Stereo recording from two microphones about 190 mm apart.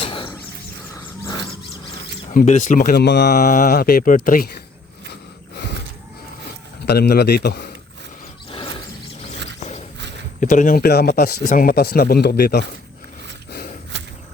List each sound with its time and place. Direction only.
0.0 s a sound: 25° left (ahead or behind)
1.2 s a sound: 15° left (ahead or behind)
2.3 s speech: 40° left (ahead or behind); by 3.3 s 65° left (ahead or behind)
3.3 s speech: 45° left (ahead or behind)
6.8 s a man's voice: 60° left (ahead or behind)
10.4 s speech: 40° left (ahead or behind)